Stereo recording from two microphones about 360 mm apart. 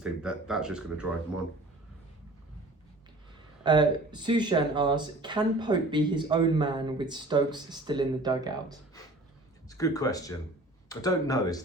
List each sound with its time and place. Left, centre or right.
0.0 s speech: centre
3.6 s speech: centre
9.6 s speech: centre